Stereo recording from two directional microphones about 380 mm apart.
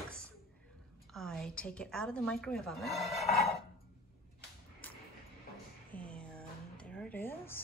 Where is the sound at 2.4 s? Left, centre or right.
Centre.